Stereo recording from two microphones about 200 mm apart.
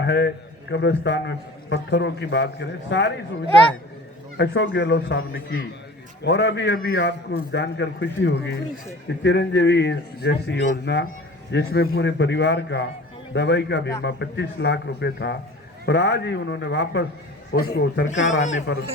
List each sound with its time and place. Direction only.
0.0 s a man's voice: 60° left (ahead or behind)
4.4 s a man's voice: 60° left (ahead or behind)
6.2 s a man's voice: 60° left (ahead or behind)